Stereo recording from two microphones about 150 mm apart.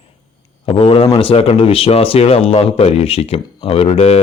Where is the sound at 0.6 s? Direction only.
40° left (ahead or behind).